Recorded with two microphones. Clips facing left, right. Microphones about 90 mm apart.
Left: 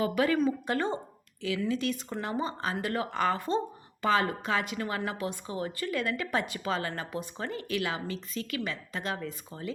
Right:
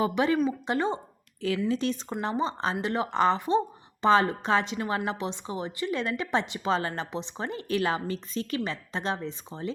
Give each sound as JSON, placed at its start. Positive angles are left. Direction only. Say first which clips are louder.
{"t": 0.0, "sound": "a woman's voice", "louder": "right 2 dB", "side_deg": -25}
{"t": 1.4, "sound": "a woman's voice", "louder": "right 3 dB", "side_deg": -35}